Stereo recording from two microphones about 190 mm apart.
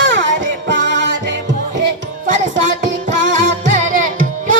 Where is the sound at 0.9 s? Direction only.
65° right (ahead or behind).